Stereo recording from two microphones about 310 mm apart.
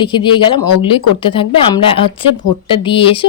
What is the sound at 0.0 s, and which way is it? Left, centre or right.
Speech, centre.